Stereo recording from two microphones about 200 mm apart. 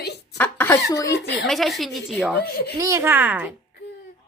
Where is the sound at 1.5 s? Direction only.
Centre (ahead or behind).